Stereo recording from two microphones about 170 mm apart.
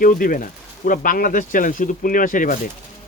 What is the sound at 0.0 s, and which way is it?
A man's voice, 55° left (ahead or behind).